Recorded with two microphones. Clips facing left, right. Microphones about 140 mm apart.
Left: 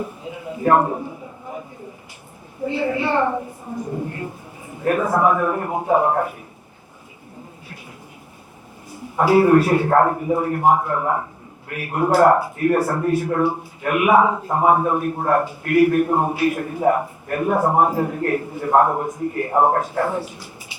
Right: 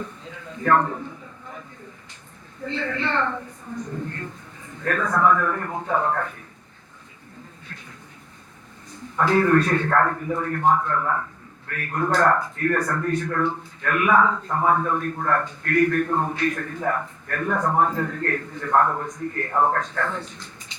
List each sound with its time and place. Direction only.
0.0 s a sound: 15° left (ahead or behind)
2.6 s a man's voice: 10° left (ahead or behind)
8.9 s a man's voice: 10° left (ahead or behind)
9.9 s a man's voice: 25° left (ahead or behind)
12.8 s a man's voice: 30° left (ahead or behind)
13.1 s a man's voice: 10° left (ahead or behind)
18.7 s a man's voice: 20° left (ahead or behind)